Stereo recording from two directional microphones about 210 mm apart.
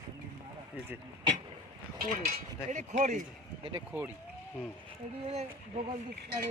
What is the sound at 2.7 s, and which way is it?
Speech, 35° right (ahead or behind).